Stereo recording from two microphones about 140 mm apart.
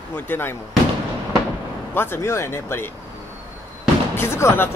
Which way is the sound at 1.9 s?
15° left (ahead or behind).